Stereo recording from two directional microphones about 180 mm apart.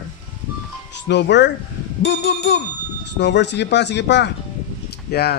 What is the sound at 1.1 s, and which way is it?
A man's voice, 75° left (ahead or behind).